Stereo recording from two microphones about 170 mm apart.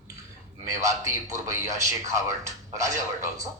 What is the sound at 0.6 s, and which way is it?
A man's voice, 20° right (ahead or behind).